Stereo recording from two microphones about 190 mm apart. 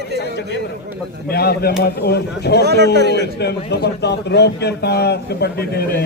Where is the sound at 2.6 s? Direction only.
60° right (ahead or behind).